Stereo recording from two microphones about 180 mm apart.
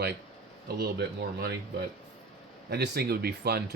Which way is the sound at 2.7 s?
65° right (ahead or behind).